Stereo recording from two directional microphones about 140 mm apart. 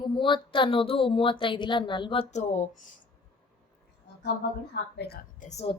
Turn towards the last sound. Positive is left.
turn(degrees=60)  # may be behind; listen again after turning